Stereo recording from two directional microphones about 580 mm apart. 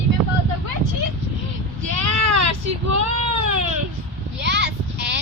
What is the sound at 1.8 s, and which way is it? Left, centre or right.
Baby cry, right.